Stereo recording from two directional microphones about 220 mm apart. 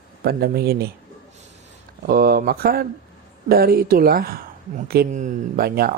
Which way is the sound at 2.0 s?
40° right (ahead or behind).